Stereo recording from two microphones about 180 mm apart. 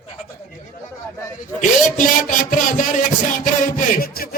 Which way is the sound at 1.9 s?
45° left (ahead or behind).